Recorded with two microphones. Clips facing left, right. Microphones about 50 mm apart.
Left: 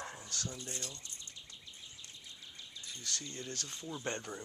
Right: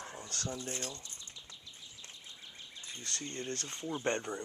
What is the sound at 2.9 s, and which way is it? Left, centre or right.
Speech, right.